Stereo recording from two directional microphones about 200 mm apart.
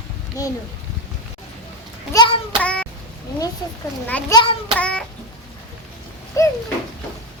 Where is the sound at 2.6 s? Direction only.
5° left (ahead or behind).